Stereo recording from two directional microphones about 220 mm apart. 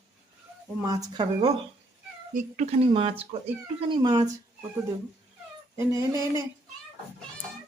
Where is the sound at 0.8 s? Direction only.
15° right (ahead or behind).